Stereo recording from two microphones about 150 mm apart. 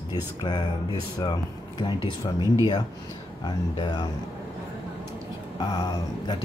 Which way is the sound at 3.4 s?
30° left (ahead or behind).